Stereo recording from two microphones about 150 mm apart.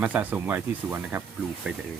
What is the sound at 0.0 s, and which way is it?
Speech, 10° right (ahead or behind).